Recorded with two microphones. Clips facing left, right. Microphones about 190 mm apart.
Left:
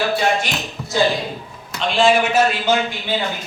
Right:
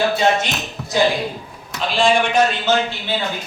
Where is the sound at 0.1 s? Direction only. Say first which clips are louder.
Right 1 dB; 20° right (ahead or behind).